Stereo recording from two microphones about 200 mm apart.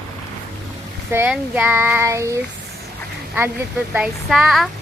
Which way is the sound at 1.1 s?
10° right (ahead or behind).